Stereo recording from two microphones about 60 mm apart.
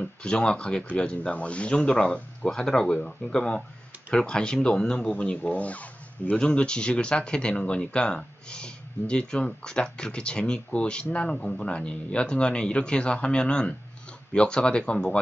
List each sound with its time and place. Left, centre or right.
0.0 s speech: centre